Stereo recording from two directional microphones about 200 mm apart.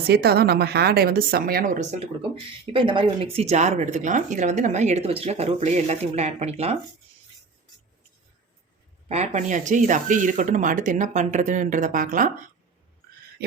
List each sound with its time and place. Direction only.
0.1 s a woman's voice: 55° right (ahead or behind)
2.3 s a woman's voice: 25° right (ahead or behind)
9.0 s a woman's voice: 35° right (ahead or behind)